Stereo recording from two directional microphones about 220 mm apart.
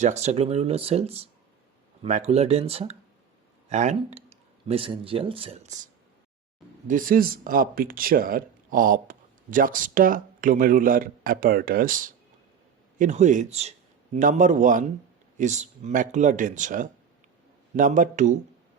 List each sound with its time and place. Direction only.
0.0 s a man's voice: 30° right (ahead or behind)